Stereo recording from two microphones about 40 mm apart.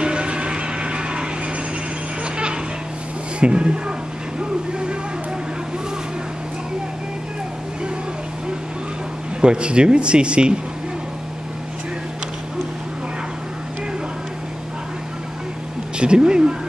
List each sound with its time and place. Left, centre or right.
0.0 s vehicle: right
2.3 s a sound: right
3.3 s speech: right
4.4 s vehicle: right
9.4 s speech: right
16.0 s speech: right